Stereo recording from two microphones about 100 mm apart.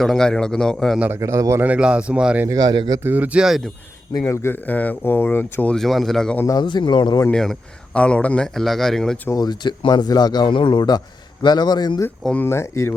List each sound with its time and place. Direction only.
0.0 s a man's voice: 5° left (ahead or behind)
1.1 s a man's voice: 30° right (ahead or behind)
1.6 s speech: 10° right (ahead or behind)
2.5 s speech: 40° right (ahead or behind)
3.0 s speech: 20° right (ahead or behind)
4.2 s speech: 25° left (ahead or behind)
5.7 s a man's voice: centre (ahead or behind)
6.4 s speech: 35° left (ahead or behind)
6.7 s speech: 50° left (ahead or behind)
7.3 s a man's voice: 5° left (ahead or behind)
9.3 s speech: 40° left (ahead or behind)
12.4 s speech: 25° left (ahead or behind)